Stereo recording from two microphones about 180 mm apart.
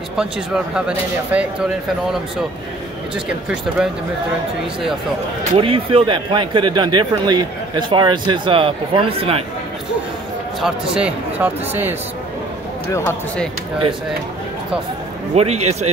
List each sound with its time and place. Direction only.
0.7 s speech: 5° right (ahead or behind)
3.3 s speech: 5° right (ahead or behind)
5.6 s speech: 30° right (ahead or behind)
10.6 s speech: 5° right (ahead or behind)
15.3 s speech: 35° right (ahead or behind)